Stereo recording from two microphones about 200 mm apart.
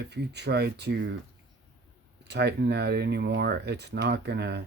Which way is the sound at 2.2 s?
55° right (ahead or behind).